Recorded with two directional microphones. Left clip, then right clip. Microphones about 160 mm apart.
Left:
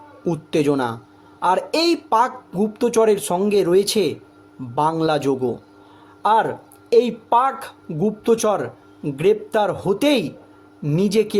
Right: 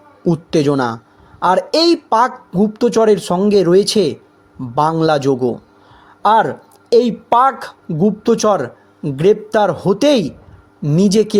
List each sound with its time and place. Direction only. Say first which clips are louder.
0.3 s a woman's voice: right 4 dB; 30° right (ahead or behind)